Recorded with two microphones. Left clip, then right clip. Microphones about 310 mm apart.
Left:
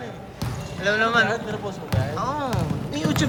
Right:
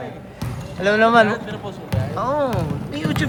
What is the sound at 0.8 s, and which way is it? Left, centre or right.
Speech, right.